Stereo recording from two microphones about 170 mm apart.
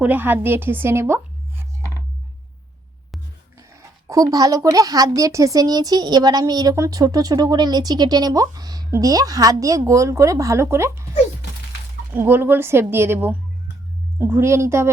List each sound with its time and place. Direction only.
0.0 s a woman's voice: 10° right (ahead or behind)
3.6 s speech: 20° right (ahead or behind)
12.1 s a woman's voice: 15° right (ahead or behind)